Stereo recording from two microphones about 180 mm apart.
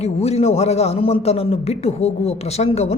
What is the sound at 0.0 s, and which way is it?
A man's voice, 35° left (ahead or behind).